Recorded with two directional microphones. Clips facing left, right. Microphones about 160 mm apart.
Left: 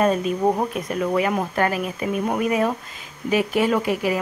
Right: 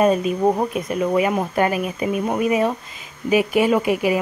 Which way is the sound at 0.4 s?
10° right (ahead or behind).